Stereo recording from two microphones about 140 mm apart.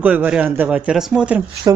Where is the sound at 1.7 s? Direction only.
25° right (ahead or behind).